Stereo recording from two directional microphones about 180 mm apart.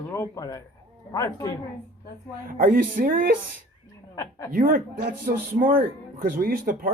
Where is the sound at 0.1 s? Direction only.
20° left (ahead or behind).